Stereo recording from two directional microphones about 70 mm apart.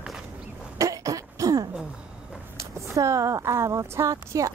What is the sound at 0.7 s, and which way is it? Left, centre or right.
Throat clearing, right.